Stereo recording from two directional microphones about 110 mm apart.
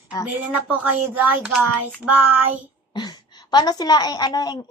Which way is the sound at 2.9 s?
40° left (ahead or behind).